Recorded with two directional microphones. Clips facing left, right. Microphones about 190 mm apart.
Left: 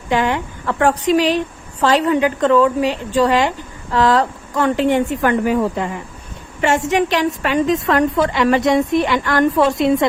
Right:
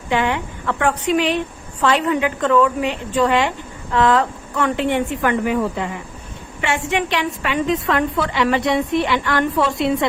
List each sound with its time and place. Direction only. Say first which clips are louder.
0.1 s a woman's voice: left 2 dB; 40° left (ahead or behind)